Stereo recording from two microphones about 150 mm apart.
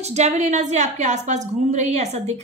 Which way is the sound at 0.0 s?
50° right (ahead or behind).